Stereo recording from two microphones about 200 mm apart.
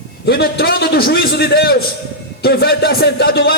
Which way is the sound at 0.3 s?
50° left (ahead or behind).